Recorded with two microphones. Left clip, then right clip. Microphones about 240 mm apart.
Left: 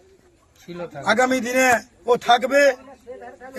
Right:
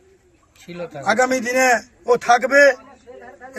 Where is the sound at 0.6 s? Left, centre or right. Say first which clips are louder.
Right 2 dB; right.